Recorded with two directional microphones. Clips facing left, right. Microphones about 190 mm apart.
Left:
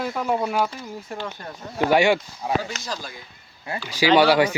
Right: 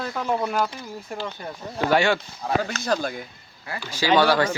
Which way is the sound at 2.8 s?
55° right (ahead or behind).